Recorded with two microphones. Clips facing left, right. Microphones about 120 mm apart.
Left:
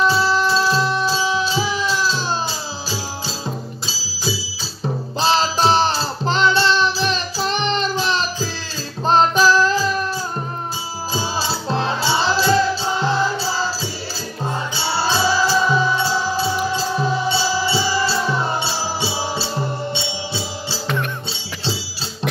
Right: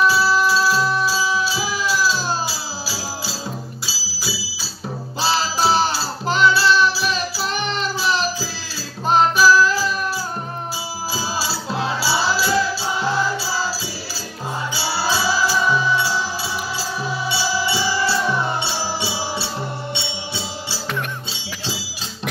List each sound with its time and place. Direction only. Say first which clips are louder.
0.0 s music: even; 10° right (ahead or behind)
11.1 s music: left 3 dB; 10° right (ahead or behind)
14.8 s music: left 3 dB; 10° right (ahead or behind)